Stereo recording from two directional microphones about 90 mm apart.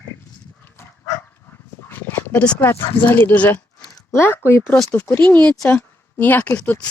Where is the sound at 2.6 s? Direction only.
25° left (ahead or behind).